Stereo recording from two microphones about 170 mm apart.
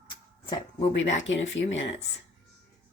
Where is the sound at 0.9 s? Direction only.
90° left.